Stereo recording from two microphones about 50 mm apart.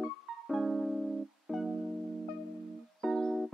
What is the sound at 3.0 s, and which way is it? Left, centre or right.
Music, centre.